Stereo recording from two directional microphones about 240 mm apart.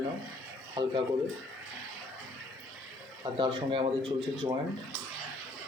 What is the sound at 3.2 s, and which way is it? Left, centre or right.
Speech, centre.